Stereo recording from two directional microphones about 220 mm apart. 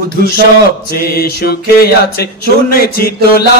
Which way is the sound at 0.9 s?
45° left (ahead or behind).